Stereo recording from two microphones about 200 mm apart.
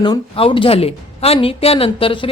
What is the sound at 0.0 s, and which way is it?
A woman's voice, 25° left (ahead or behind).